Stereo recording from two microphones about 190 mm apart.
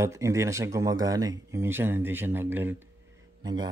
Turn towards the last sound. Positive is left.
turn(degrees=-20)  # may be behind; listen again after turning